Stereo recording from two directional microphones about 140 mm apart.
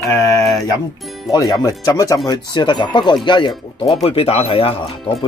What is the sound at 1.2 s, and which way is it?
Speech, 25° left (ahead or behind).